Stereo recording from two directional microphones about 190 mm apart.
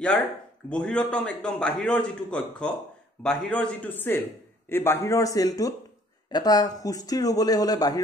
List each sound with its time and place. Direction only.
0.7 s a man's voice: 5° left (ahead or behind)